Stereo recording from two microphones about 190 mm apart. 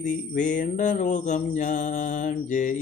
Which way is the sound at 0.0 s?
40° left (ahead or behind).